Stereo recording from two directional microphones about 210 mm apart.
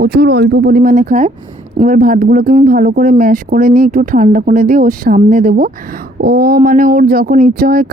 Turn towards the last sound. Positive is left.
turn(degrees=-45)  # may be behind; listen again after turning